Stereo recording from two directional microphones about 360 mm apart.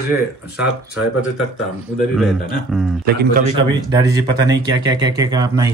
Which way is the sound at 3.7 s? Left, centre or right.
Centre.